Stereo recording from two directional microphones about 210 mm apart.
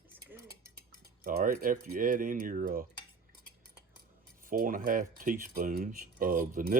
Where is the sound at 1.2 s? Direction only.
45° right (ahead or behind).